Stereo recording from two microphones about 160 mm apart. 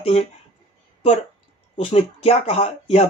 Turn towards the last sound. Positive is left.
turn(degrees=40)  # may be behind; listen again after turning